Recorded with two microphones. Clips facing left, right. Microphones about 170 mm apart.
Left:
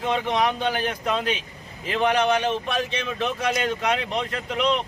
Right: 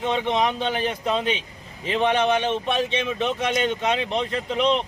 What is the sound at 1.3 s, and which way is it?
Vehicle, 25° right (ahead or behind).